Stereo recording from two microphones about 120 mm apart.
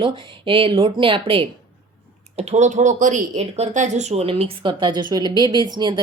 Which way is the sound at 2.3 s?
70° right (ahead or behind).